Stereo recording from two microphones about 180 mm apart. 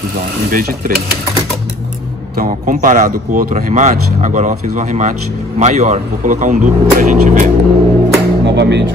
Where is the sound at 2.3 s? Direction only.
50° right (ahead or behind).